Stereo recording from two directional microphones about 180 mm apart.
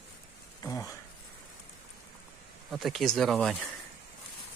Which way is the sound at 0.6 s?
15° left (ahead or behind).